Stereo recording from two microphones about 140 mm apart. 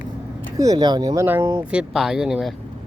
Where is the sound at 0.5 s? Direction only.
25° right (ahead or behind).